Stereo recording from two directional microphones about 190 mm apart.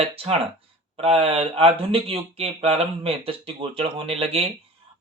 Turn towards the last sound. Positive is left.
turn(degrees=-30)  # may be behind; listen again after turning